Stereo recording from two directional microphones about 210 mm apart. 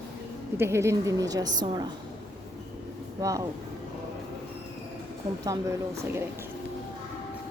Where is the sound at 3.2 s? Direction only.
15° right (ahead or behind).